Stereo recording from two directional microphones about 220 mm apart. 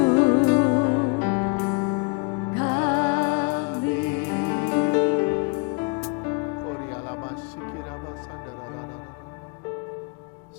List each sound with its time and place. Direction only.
0.0 s music: 25° left (ahead or behind)